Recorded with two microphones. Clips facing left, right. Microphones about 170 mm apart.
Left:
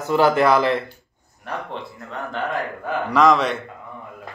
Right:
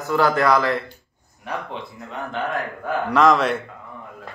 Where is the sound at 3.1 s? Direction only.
Centre (ahead or behind).